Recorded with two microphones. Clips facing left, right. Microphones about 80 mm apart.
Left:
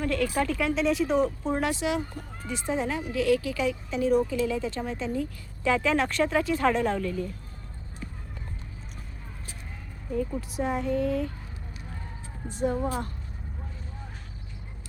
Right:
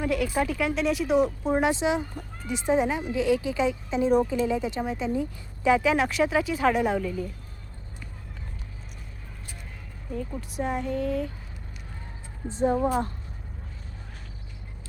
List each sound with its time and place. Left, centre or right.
0.0 s a woman's voice: centre
10.1 s speech: centre
12.5 s speech: right